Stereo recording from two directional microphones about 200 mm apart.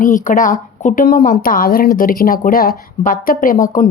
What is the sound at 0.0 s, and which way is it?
Speech, 40° left (ahead or behind).